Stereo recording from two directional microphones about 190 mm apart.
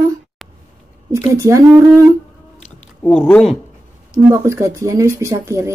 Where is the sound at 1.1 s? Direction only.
15° right (ahead or behind).